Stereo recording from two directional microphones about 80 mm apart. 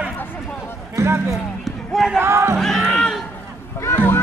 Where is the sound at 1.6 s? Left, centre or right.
Centre.